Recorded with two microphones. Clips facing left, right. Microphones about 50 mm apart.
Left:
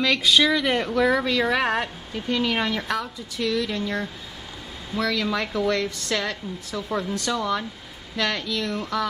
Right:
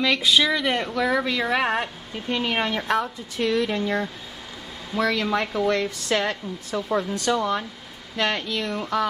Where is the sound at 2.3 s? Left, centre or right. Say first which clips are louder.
Even; centre.